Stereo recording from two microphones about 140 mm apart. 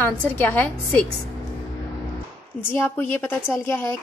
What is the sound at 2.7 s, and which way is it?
A woman's voice, 15° left (ahead or behind).